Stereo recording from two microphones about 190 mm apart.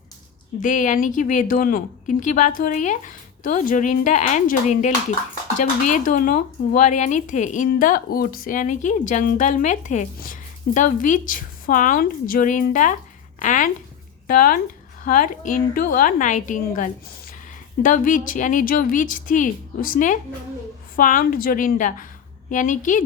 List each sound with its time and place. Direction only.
0.6 s a woman's voice: 40° left (ahead or behind)